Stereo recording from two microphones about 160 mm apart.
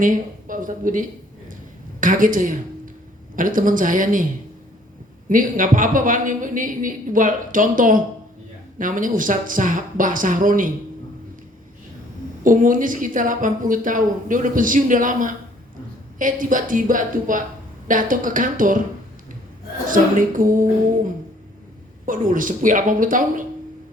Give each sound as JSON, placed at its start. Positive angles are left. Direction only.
{"t": 0.0, "sound": "a woman's voice", "side_deg": -55}
{"t": 5.3, "sound": "a woman's voice", "side_deg": -55}
{"t": 12.4, "sound": "a woman's voice", "side_deg": -55}
{"t": 19.9, "sound": "a woman's voice", "side_deg": -55}